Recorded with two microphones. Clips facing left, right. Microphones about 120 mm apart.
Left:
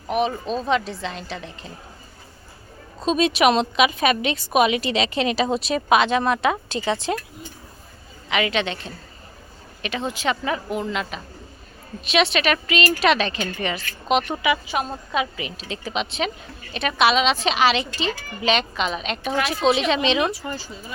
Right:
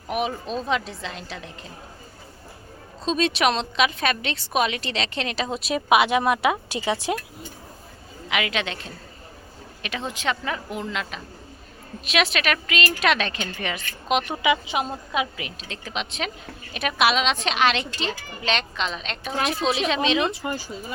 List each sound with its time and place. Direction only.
0.1 s a woman's voice: 5° right (ahead or behind)
3.0 s a woman's voice: 10° left (ahead or behind)
5.9 s a woman's voice: 10° right (ahead or behind)
8.3 s a woman's voice: centre (ahead or behind)
14.4 s speech: 20° right (ahead or behind)
15.1 s a woman's voice: 5° right (ahead or behind)
20.3 s a woman's voice: 15° right (ahead or behind)